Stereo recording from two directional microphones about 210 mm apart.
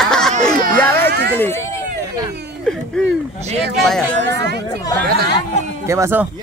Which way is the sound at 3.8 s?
Centre (ahead or behind).